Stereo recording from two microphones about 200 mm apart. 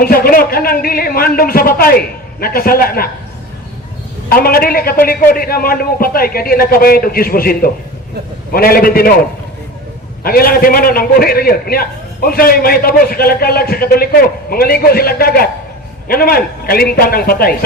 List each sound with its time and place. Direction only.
0.0 s a man's voice: 50° left (ahead or behind)
4.4 s a man's voice: 45° left (ahead or behind)
10.2 s a man's voice: 50° left (ahead or behind)